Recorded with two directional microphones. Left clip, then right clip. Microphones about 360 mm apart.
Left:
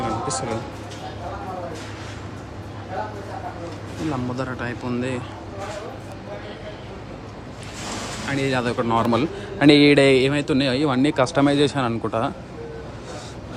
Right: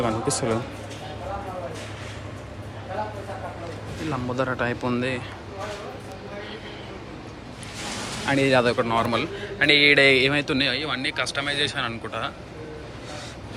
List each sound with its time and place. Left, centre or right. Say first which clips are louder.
0.0 s a man's voice: even; centre
4.1 s speech: right 3 dB; centre
8.3 s a man's voice: right 4 dB; centre